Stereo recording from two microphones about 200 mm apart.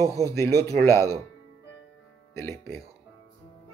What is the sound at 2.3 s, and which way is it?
Speech, 15° left (ahead or behind).